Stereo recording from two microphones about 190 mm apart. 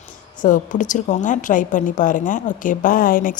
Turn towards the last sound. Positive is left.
turn(degrees=45)  # may be behind; listen again after turning